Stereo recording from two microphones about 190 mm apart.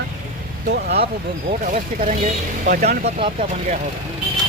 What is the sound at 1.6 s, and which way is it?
Speech, 40° right (ahead or behind).